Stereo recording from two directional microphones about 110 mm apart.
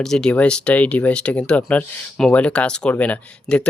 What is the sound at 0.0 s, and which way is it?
Speech, 5° left (ahead or behind).